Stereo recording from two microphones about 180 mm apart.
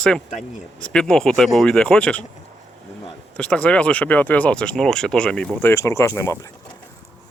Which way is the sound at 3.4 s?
5° left (ahead or behind).